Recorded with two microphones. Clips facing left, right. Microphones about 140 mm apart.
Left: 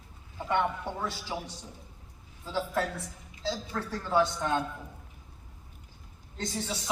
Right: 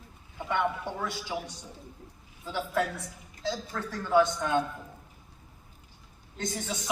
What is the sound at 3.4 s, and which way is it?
A woman's voice, 35° left (ahead or behind).